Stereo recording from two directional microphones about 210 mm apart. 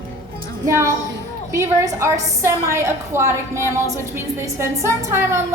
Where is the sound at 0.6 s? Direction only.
15° right (ahead or behind).